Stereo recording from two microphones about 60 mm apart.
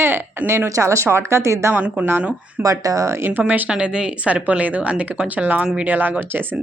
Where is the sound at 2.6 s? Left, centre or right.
Right.